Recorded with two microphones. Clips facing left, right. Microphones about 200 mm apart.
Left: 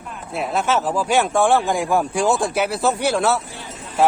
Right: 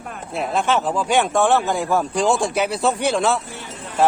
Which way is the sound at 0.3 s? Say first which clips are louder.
Even; 5° left (ahead or behind).